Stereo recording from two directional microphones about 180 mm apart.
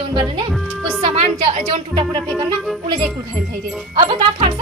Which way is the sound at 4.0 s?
25° right (ahead or behind).